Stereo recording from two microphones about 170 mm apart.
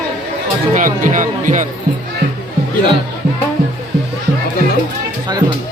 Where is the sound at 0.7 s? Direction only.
50° right (ahead or behind).